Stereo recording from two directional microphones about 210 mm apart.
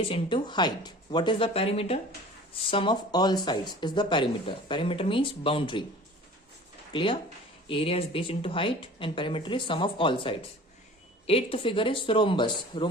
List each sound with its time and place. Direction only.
0.0 s speech: 25° left (ahead or behind)
6.9 s speech: 25° left (ahead or behind)